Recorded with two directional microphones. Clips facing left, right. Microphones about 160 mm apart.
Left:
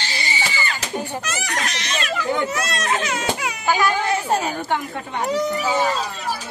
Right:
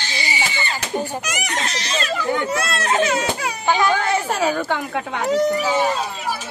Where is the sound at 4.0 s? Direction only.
90° right.